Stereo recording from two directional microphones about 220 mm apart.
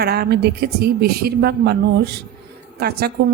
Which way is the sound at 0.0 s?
45° right (ahead or behind).